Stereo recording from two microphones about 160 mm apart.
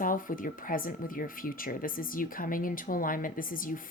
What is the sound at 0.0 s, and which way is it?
Speech, 60° left (ahead or behind).